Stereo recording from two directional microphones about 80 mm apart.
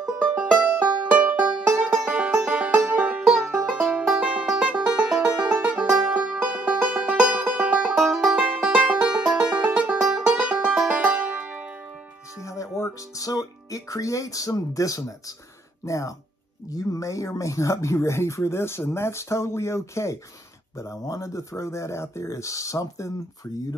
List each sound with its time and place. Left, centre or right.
0.2 s music: centre
3.3 s music: centre
8.0 s music: centre
8.7 s music: centre
9.9 s music: centre; by 11.6 s right
12.4 s music: left
15.8 s speech: left